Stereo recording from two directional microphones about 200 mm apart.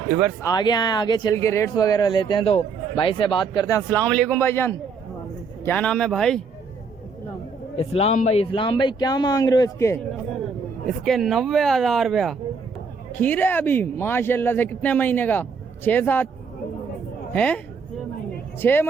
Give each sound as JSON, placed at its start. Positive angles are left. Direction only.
{"t": 0.4, "sound": "speech", "side_deg": 20}
{"t": 7.8, "sound": "speech", "side_deg": 30}
{"t": 11.0, "sound": "speech", "side_deg": 0}
{"t": 17.3, "sound": "speech", "side_deg": 5}
{"t": 18.6, "sound": "speech", "side_deg": 10}